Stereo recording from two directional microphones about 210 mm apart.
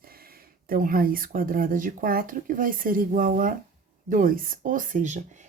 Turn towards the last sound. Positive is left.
turn(degrees=-35)  # may be behind; listen again after turning